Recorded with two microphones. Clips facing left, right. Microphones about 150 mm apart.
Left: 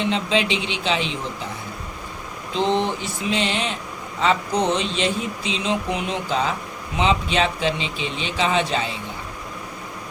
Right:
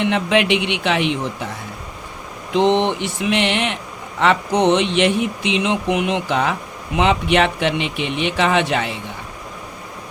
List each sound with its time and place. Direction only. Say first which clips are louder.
0.0 s speech: right 4 dB; 70° right (ahead or behind)
2.5 s speech: right 5 dB; 70° right (ahead or behind)